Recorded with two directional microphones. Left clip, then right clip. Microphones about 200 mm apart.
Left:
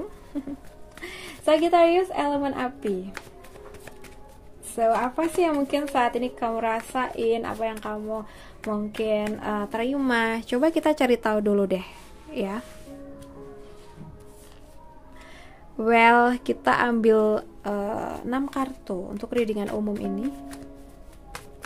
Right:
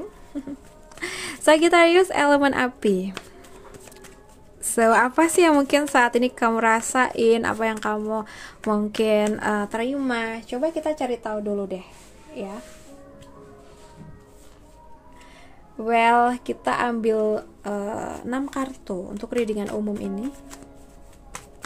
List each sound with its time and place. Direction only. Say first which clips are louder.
0.3 s music: even; centre (ahead or behind)
1.0 s a woman's voice: right 6 dB; 30° right (ahead or behind)
4.7 s a woman's voice: right 5 dB; 35° right (ahead or behind)
9.7 s a woman's voice: right 1 dB; 5° right (ahead or behind)
9.9 s a woman's voice: left 2 dB; 10° left (ahead or behind); by 12.6 s 25° left (ahead or behind)
15.8 s speech: even; 15° left (ahead or behind)
17.7 s speech: even; centre (ahead or behind)